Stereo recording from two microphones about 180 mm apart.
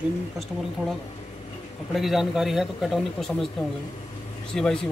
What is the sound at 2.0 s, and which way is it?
A man's voice, centre (ahead or behind).